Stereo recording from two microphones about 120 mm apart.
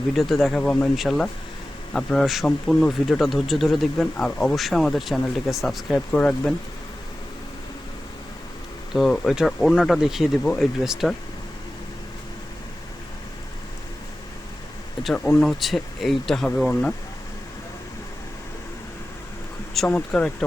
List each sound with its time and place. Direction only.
0.2 s a man's voice: centre (ahead or behind)
6.1 s speech: 10° left (ahead or behind)
8.9 s a man's voice: centre (ahead or behind)
15.1 s a man's voice: 10° left (ahead or behind)
19.9 s speech: 10° left (ahead or behind)